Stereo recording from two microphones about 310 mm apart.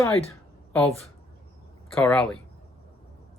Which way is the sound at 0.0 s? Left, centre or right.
Centre.